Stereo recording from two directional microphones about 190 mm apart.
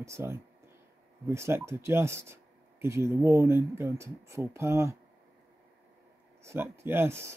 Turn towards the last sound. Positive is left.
turn(degrees=-15)  # may be behind; listen again after turning